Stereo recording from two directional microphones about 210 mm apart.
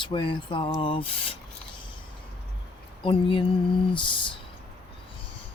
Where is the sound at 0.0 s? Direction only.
25° left (ahead or behind).